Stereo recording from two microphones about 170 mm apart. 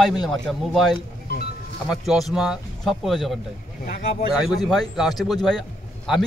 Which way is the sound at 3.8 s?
55° left (ahead or behind).